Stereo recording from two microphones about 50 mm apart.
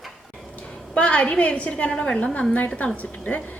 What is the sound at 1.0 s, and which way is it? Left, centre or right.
A woman's voice, left.